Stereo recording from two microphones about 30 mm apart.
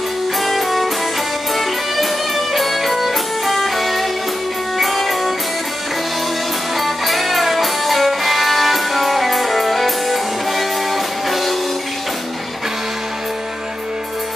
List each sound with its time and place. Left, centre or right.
0.4 s music: centre
6.8 s music: centre